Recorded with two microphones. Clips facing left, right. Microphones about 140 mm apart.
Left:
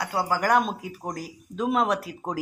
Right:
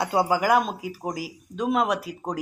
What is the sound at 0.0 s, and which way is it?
Speech, 20° right (ahead or behind).